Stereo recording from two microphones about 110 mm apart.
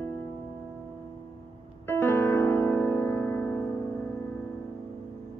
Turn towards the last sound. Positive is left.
turn(degrees=20)  # may be behind; listen again after turning